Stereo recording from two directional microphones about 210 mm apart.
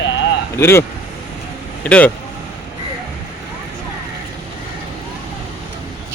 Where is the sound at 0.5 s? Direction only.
10° left (ahead or behind).